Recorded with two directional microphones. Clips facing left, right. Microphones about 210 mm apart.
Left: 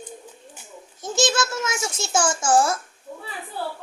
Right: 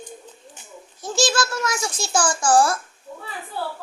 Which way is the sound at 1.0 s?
20° left (ahead or behind).